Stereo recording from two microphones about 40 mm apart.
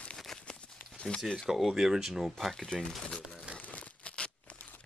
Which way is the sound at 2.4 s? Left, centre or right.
Centre.